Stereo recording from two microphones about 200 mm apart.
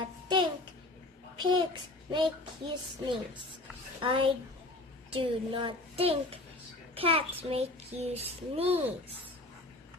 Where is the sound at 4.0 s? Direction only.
25° right (ahead or behind).